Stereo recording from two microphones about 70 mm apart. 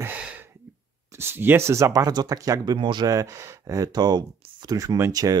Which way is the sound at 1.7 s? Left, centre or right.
Right.